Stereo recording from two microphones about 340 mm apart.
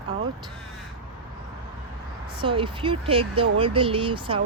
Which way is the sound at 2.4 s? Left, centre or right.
Centre.